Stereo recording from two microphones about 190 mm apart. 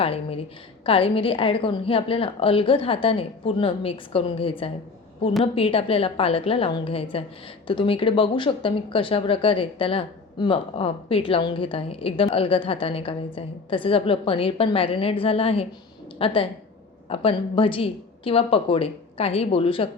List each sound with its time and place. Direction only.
0.0 s a woman's voice: 30° left (ahead or behind)